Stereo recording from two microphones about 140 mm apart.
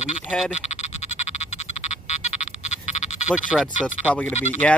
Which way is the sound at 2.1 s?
55° left (ahead or behind).